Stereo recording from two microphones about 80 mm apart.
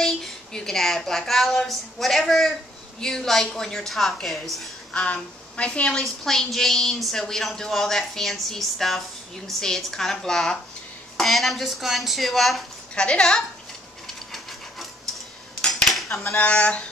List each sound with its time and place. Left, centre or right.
0.0 s a woman's voice: centre
4.9 s a woman's voice: centre
13.0 s a woman's voice: centre
14.0 s steam: centre
15.6 s cutlery: centre
16.3 s a woman's voice: centre